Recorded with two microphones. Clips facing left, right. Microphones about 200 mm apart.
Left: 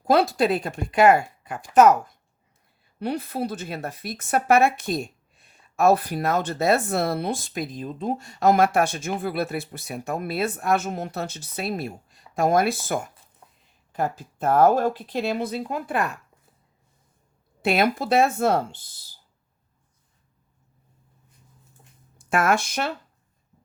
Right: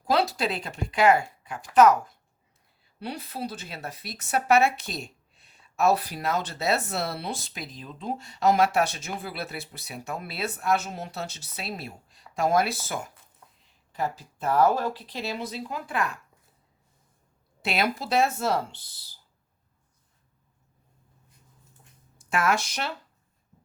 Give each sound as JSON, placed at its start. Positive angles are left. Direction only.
{"t": 0.1, "sound": "speech", "side_deg": 50}
{"t": 3.0, "sound": "speech", "side_deg": 55}
{"t": 17.6, "sound": "speech", "side_deg": 50}
{"t": 22.3, "sound": "speech", "side_deg": 50}